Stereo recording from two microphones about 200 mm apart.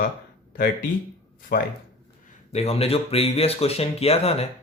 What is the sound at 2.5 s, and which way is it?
Speech, 30° left (ahead or behind).